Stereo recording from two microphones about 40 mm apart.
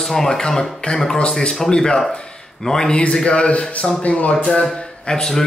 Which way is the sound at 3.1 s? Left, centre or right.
Left.